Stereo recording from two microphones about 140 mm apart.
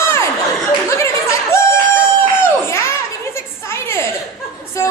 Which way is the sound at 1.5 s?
20° left (ahead or behind).